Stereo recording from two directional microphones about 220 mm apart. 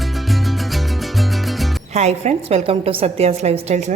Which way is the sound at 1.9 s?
30° right (ahead or behind).